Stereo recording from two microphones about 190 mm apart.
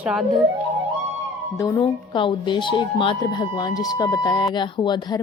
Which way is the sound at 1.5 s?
15° left (ahead or behind).